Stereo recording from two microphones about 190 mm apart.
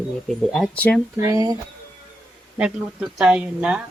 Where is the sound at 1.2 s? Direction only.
15° right (ahead or behind).